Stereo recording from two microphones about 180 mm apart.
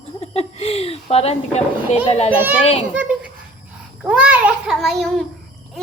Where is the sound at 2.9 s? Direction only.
5° right (ahead or behind).